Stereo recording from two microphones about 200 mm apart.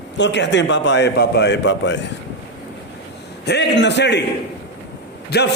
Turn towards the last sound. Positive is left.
turn(degrees=55)  # may be behind; listen again after turning